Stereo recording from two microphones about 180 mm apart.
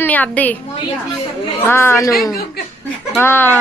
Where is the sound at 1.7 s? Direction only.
15° left (ahead or behind).